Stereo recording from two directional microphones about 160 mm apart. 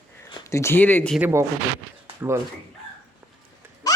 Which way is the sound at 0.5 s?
15° left (ahead or behind).